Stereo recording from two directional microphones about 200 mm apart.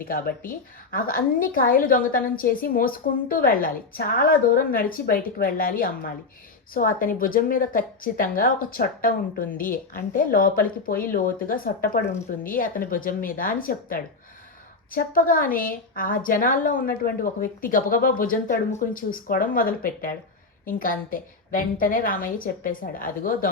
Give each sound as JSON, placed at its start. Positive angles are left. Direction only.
{"t": 0.0, "sound": "a woman's voice", "side_deg": 45}